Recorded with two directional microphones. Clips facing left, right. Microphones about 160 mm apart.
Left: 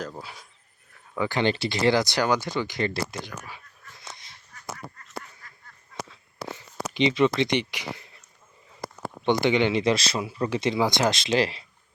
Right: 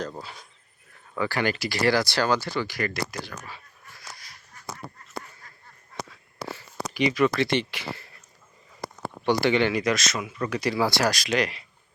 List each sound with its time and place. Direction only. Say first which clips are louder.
0.0 s speech: right 2 dB; 10° left (ahead or behind)
1.2 s speech: left 2 dB; 20° left (ahead or behind)
3.3 s dog: even; 10° left (ahead or behind)
6.6 s speech: left 1 dB; 25° left (ahead or behind)
9.2 s speech: even; 20° left (ahead or behind)